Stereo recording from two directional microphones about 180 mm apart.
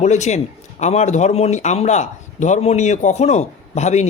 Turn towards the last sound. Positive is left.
turn(degrees=40)  # may be behind; listen again after turning